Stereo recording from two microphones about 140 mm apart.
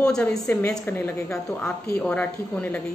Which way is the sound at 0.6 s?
20° left (ahead or behind).